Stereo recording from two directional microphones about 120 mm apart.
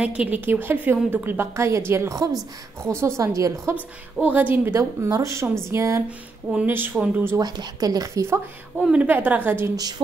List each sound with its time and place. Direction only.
0.0 s a woman's voice: 10° right (ahead or behind); by 3.7 s 25° right (ahead or behind)
3.7 s a woman's voice: 15° right (ahead or behind)
6.0 s a woman's voice: 10° right (ahead or behind)
7.3 s a woman's voice: 35° right (ahead or behind)
8.7 s a woman's voice: 10° right (ahead or behind)
9.8 s a woman's voice: 35° right (ahead or behind)